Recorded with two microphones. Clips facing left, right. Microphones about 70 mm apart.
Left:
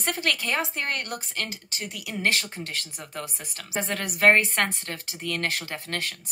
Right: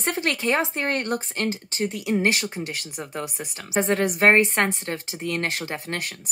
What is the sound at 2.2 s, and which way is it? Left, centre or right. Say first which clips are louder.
Speech: right 3 dB; centre.